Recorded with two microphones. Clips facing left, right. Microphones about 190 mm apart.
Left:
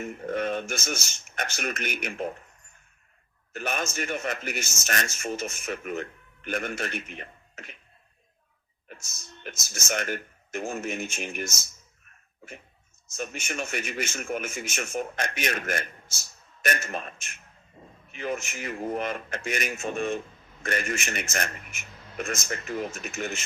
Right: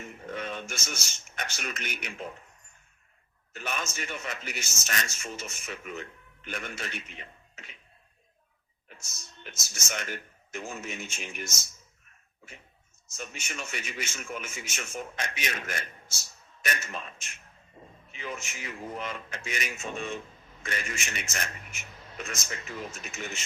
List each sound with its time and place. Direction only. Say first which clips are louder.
0.0 s a man's voice: left 8 dB; 50° left (ahead or behind)
3.5 s a man's voice: left 5 dB; 50° left (ahead or behind)
8.9 s a man's voice: left 5 dB; 50° left (ahead or behind)
13.1 s a man's voice: left 7 dB; 50° left (ahead or behind)